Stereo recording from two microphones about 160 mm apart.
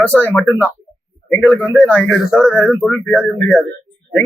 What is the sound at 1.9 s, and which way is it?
Speech, 5° left (ahead or behind).